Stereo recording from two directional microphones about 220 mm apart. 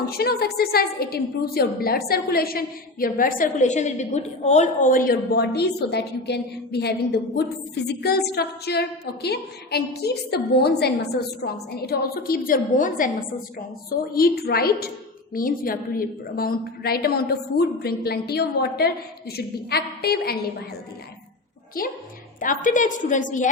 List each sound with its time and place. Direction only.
0.0 s a woman's voice: 45° left (ahead or behind)
14.1 s a woman's voice: 45° left (ahead or behind)
21.8 s a woman's voice: 40° left (ahead or behind)